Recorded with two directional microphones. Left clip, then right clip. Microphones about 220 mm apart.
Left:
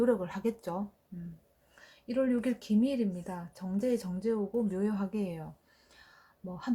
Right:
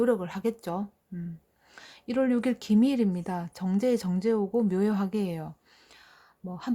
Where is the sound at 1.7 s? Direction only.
40° right (ahead or behind).